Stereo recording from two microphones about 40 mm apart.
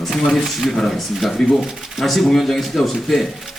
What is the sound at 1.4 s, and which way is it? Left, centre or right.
Speech, centre.